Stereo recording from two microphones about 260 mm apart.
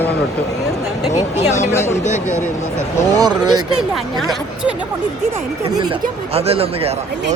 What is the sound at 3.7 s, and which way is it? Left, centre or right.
Speech, centre.